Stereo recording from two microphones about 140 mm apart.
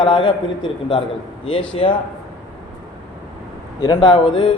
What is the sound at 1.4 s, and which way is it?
Speech, 40° left (ahead or behind).